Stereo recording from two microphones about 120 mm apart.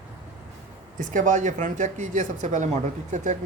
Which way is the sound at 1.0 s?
90° right.